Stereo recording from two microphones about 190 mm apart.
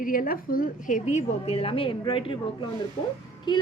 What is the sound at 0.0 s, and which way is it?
A woman's voice, 45° left (ahead or behind).